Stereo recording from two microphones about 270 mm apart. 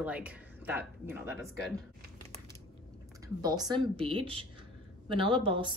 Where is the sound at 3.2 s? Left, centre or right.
Centre.